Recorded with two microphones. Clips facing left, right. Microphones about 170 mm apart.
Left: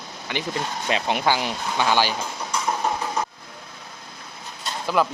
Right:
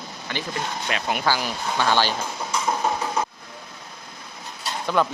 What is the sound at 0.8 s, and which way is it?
Speech, 25° left (ahead or behind).